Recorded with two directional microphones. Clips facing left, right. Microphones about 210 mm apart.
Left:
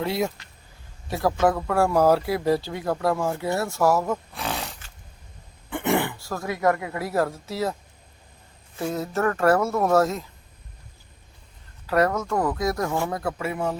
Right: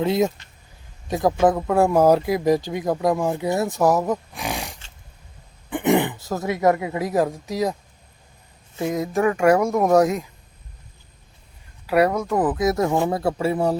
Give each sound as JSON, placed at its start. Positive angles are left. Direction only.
{"t": 0.0, "sound": "speech", "side_deg": -20}
{"t": 11.9, "sound": "speech", "side_deg": -10}
{"t": 13.1, "sound": "speech", "side_deg": -30}